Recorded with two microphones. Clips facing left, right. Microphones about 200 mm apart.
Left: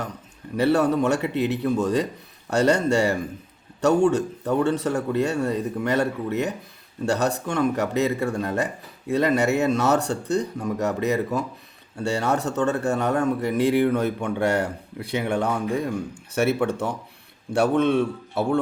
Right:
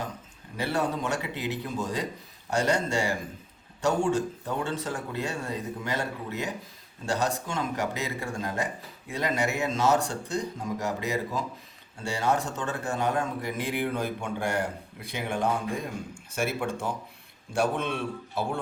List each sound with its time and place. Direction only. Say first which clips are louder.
0.5 s speech: left 9 dB; 65° left (ahead or behind)